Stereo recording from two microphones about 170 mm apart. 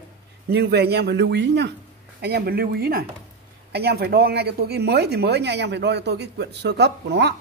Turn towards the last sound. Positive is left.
turn(degrees=-80)